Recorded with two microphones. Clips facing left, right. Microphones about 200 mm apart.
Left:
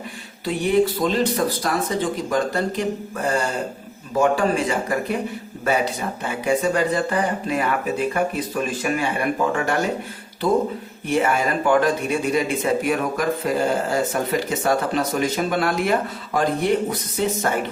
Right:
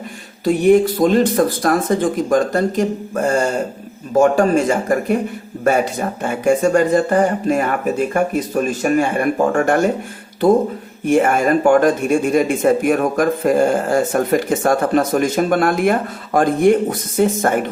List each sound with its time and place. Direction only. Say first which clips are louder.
0.4 s speech: right 7 dB; 45° right (ahead or behind)
11.0 s speech: right 6 dB; 50° right (ahead or behind)